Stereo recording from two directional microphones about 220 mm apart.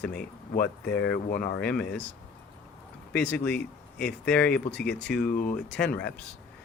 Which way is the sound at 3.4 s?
5° left (ahead or behind).